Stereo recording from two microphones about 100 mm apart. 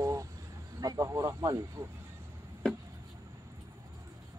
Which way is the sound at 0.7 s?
35° right (ahead or behind).